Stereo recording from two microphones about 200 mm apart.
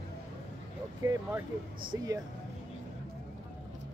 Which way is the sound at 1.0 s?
15° right (ahead or behind).